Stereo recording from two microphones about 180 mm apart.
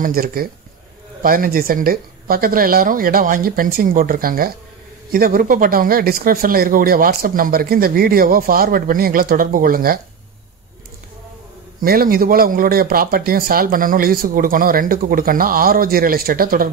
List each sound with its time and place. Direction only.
0.0 s speech: 55° right (ahead or behind)
11.8 s speech: 55° right (ahead or behind)